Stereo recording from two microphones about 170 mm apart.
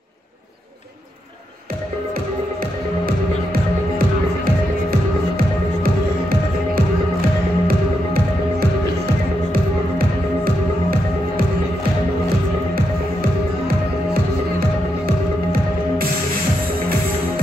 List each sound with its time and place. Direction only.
6.7 s music: 60° right (ahead or behind)